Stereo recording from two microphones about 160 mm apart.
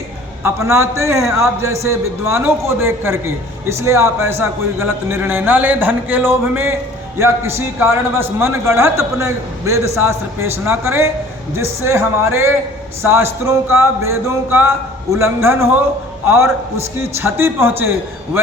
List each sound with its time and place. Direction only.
0.4 s a man's voice: 15° right (ahead or behind)